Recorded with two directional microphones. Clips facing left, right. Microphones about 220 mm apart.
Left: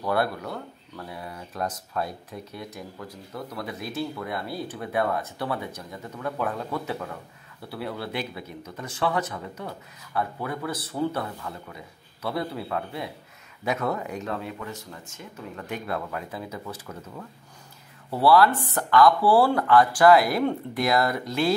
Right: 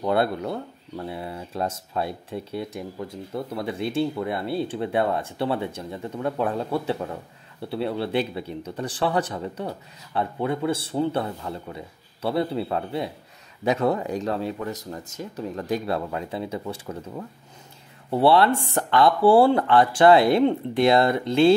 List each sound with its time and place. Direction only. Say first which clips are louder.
0.0 s speech: right 3 dB; 25° right (ahead or behind)